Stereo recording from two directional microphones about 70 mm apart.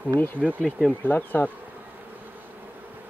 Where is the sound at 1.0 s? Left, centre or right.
Left.